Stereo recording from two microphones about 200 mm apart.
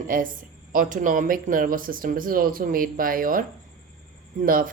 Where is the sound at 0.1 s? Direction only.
45° right (ahead or behind).